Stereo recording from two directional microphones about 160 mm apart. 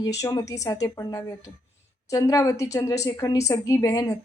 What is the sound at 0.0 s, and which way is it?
Speech, 20° left (ahead or behind).